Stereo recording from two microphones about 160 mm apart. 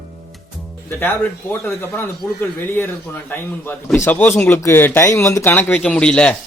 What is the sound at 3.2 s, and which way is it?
Speech, 15° left (ahead or behind).